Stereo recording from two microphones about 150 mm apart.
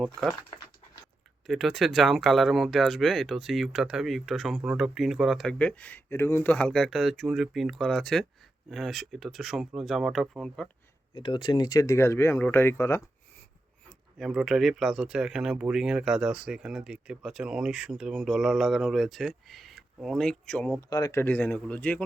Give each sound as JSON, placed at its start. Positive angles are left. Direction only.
{"t": 0.0, "sound": "speech", "side_deg": 0}
{"t": 1.5, "sound": "speech", "side_deg": 0}
{"t": 11.1, "sound": "speech", "side_deg": 30}
{"t": 14.2, "sound": "speech", "side_deg": 0}
{"t": 20.9, "sound": "speech", "side_deg": 20}